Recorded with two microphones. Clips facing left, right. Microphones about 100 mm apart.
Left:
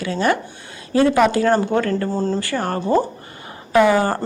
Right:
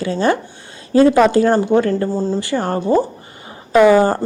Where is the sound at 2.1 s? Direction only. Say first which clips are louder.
Right 2 dB; 10° right (ahead or behind).